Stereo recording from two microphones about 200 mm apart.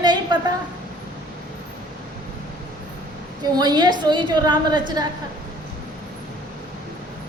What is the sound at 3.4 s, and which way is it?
A woman's voice, 20° right (ahead or behind).